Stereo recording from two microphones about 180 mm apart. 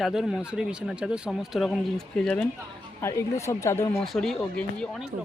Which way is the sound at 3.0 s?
15° left (ahead or behind).